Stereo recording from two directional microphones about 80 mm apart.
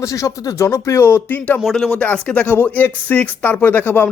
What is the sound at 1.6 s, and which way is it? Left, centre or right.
Speech, centre.